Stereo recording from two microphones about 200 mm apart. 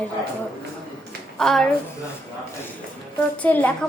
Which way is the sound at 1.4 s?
Centre (ahead or behind).